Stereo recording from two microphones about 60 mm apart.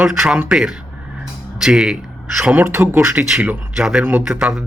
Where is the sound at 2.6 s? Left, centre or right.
Right.